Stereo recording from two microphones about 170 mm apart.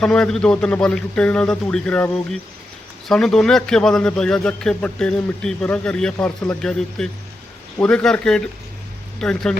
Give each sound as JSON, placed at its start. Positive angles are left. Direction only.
{"t": 0.0, "sound": "a man's voice", "side_deg": 5}